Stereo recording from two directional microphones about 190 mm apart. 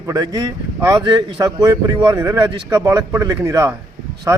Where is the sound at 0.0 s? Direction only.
20° right (ahead or behind).